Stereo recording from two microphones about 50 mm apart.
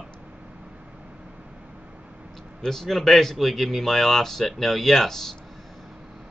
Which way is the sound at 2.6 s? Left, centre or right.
Centre.